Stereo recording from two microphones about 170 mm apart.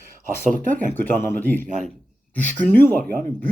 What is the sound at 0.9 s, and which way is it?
Speech, 15° left (ahead or behind).